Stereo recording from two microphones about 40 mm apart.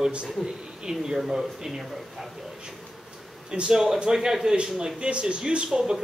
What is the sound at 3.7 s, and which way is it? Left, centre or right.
Speech, centre.